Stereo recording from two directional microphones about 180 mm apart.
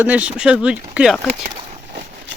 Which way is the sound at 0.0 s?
10° right (ahead or behind).